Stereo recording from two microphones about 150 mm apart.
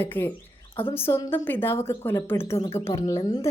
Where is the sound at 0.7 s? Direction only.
35° left (ahead or behind).